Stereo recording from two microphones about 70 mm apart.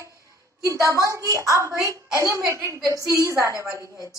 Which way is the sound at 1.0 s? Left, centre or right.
Right.